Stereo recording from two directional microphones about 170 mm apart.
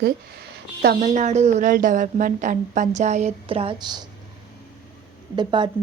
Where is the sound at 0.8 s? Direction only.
65° right (ahead or behind).